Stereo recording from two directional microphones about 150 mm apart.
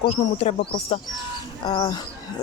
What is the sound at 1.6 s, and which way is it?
Speech, 30° left (ahead or behind).